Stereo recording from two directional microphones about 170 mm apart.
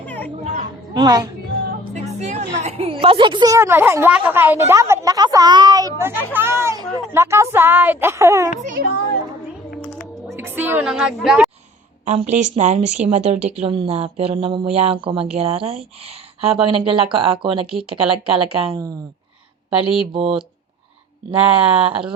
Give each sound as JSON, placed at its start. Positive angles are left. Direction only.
{"t": 0.0, "sound": "children playing", "side_deg": 10}
{"t": 0.9, "sound": "a woman's voice", "side_deg": -25}
{"t": 1.9, "sound": "a woman's voice", "side_deg": -40}
{"t": 10.3, "sound": "a woman's voice", "side_deg": -10}
{"t": 12.0, "sound": "speech", "side_deg": -40}
{"t": 21.4, "sound": "speech", "side_deg": -30}